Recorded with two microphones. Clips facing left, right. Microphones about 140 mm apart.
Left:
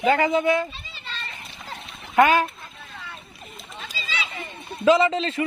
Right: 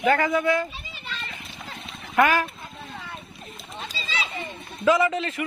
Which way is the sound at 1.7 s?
25° left (ahead or behind).